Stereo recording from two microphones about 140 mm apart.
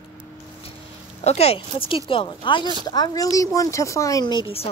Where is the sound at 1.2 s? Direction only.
50° left (ahead or behind).